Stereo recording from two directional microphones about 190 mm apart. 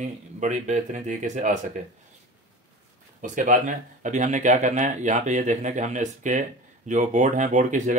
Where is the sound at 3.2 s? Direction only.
45° right (ahead or behind).